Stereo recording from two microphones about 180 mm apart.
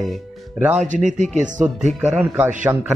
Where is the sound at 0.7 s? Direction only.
45° right (ahead or behind).